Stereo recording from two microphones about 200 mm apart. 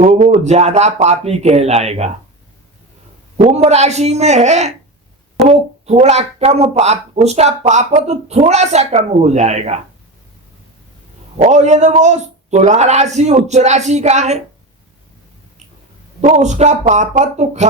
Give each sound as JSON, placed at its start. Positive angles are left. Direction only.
{"t": 0.0, "sound": "a woman's voice", "side_deg": -35}
{"t": 3.4, "sound": "a woman's voice", "side_deg": -35}
{"t": 11.4, "sound": "a woman's voice", "side_deg": -35}
{"t": 16.2, "sound": "a woman's voice", "side_deg": -35}